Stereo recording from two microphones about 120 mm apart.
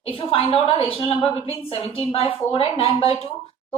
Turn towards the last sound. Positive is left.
turn(degrees=50)  # may be behind; listen again after turning